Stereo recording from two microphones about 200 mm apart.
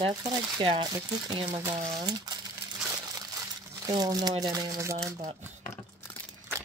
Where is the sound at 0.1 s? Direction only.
20° right (ahead or behind).